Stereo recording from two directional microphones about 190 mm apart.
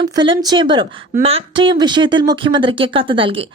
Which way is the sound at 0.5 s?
25° right (ahead or behind).